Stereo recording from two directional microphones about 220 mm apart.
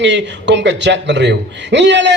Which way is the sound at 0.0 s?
55° right (ahead or behind).